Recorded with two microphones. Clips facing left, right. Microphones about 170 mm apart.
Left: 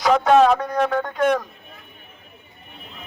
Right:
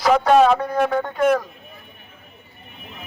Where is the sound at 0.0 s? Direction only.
Centre (ahead or behind).